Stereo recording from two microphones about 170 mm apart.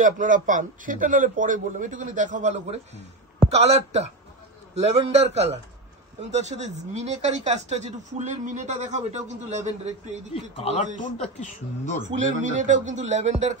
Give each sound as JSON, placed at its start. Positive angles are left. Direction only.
{"t": 0.0, "sound": "a man's voice", "side_deg": -50}
{"t": 10.6, "sound": "speech", "side_deg": 35}
{"t": 12.2, "sound": "speech", "side_deg": -45}